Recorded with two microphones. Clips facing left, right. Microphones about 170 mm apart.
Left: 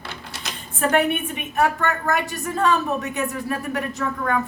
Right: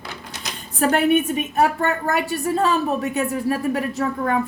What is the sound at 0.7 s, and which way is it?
A woman's voice, 40° right (ahead or behind).